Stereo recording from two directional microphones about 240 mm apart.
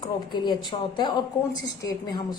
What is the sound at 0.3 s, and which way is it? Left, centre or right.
A woman's voice, centre.